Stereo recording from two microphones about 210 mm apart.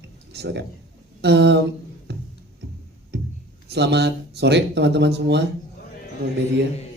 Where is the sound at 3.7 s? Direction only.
55° right (ahead or behind).